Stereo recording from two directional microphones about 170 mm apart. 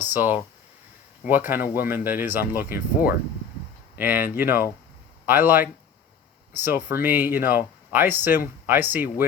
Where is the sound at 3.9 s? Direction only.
10° right (ahead or behind).